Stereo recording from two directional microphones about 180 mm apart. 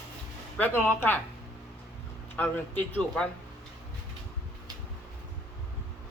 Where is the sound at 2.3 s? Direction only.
10° left (ahead or behind).